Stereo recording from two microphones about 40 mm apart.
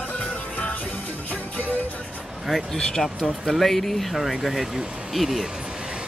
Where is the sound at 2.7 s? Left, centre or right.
Centre.